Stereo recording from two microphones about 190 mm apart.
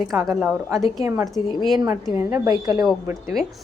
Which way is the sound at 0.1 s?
20° right (ahead or behind).